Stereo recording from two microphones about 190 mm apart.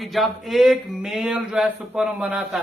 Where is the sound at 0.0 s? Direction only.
Centre (ahead or behind).